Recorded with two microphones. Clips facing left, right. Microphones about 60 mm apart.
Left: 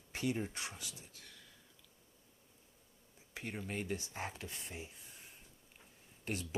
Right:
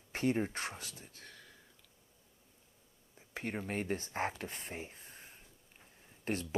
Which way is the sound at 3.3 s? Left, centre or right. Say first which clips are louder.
Right 4 dB; right.